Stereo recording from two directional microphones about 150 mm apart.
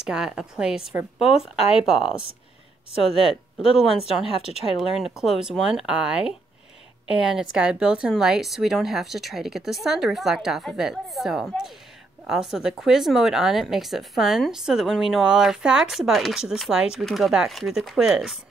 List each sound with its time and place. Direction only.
0.0 s speech: 5° right (ahead or behind)
3.7 s speech: 5° right (ahead or behind)
4.3 s a woman's voice: 40° left (ahead or behind)
5.2 s speech: centre (ahead or behind)